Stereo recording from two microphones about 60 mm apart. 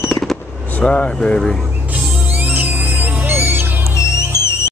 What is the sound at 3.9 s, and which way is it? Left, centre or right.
Music, left.